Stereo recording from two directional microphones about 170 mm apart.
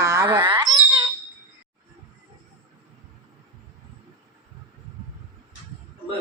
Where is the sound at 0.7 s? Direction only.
30° right (ahead or behind).